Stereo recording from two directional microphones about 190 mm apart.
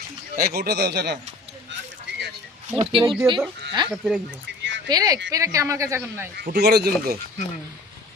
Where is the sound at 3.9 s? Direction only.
Centre (ahead or behind).